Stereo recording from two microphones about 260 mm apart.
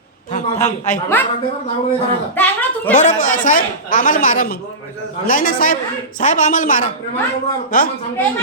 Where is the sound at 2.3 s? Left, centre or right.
Centre.